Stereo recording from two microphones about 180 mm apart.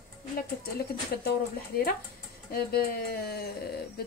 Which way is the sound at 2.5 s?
55° left (ahead or behind).